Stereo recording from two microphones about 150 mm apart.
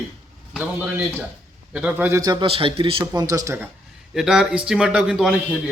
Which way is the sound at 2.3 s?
35° right (ahead or behind).